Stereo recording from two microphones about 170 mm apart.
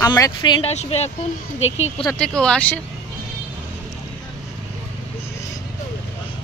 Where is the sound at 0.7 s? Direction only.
40° left (ahead or behind).